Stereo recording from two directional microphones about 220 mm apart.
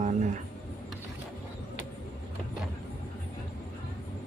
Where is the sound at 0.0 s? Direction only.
35° right (ahead or behind).